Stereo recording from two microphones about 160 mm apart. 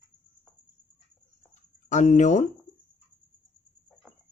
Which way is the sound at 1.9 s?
50° left (ahead or behind).